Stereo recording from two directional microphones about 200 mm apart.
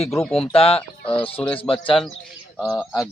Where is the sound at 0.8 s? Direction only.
5° left (ahead or behind).